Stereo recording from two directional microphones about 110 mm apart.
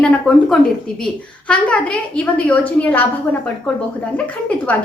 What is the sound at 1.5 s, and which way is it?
A woman's voice, 10° left (ahead or behind).